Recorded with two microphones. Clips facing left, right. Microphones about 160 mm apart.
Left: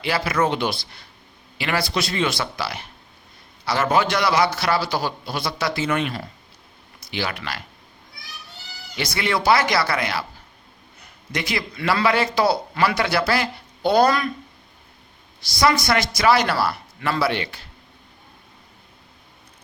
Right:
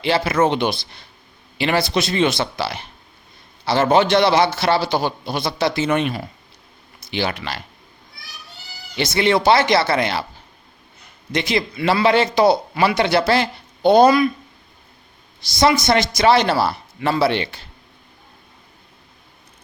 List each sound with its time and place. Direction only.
0.0 s a man's voice: 25° right (ahead or behind)
9.0 s a man's voice: 25° right (ahead or behind)
11.3 s a man's voice: 25° right (ahead or behind)
15.4 s a man's voice: 25° right (ahead or behind)